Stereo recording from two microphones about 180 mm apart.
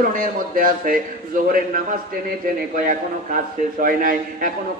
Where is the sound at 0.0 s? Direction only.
50° right (ahead or behind).